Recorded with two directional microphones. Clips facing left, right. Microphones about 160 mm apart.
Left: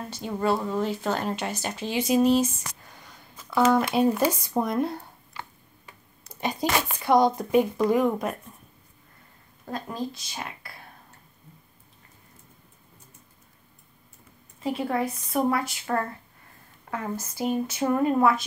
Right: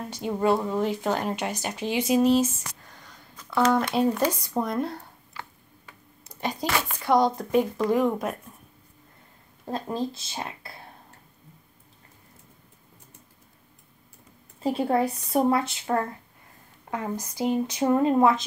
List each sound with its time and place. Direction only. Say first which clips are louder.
0.1 s speech: right 2 dB; 15° right (ahead or behind)
2.1 s speech: even; 5° left (ahead or behind)
6.4 s speech: left 2 dB; 20° left (ahead or behind); by 8.4 s centre (ahead or behind)
9.7 s speech: right 3 dB; 25° right (ahead or behind)
14.6 s a woman's voice: right 3 dB; 30° right (ahead or behind)